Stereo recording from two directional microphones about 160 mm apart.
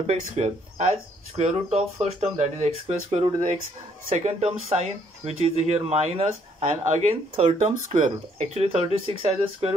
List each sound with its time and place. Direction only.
0.0 s speech: 45° right (ahead or behind)